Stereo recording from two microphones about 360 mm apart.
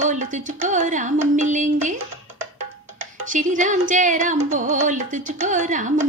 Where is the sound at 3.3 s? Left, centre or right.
Right.